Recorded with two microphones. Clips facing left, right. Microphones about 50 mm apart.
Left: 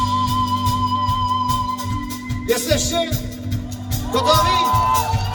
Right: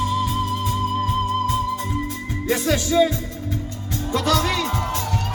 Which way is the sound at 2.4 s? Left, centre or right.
Right.